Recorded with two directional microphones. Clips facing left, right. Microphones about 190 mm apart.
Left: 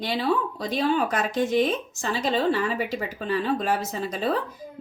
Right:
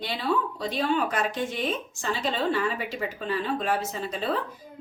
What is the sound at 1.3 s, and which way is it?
A woman's voice, 40° left (ahead or behind).